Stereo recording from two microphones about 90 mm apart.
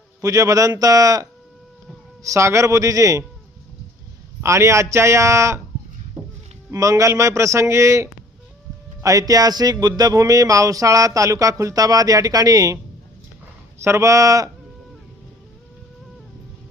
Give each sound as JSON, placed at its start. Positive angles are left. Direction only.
{"t": 0.2, "sound": "speech", "side_deg": -40}
{"t": 4.4, "sound": "speech", "side_deg": -35}
{"t": 6.7, "sound": "speech", "side_deg": -40}
{"t": 13.8, "sound": "speech", "side_deg": -35}